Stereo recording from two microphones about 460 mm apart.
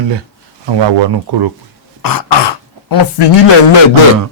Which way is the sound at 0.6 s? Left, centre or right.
Right.